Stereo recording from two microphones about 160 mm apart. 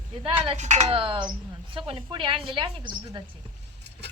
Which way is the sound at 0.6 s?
45° right (ahead or behind).